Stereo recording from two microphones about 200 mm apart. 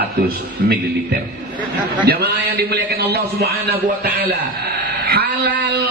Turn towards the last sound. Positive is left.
turn(degrees=-50)  # may be behind; listen again after turning